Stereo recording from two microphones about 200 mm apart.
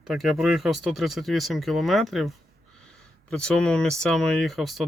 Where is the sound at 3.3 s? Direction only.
5° left (ahead or behind).